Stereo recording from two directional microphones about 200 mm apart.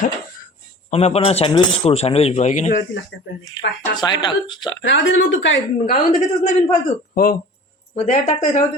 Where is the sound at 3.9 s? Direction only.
20° left (ahead or behind).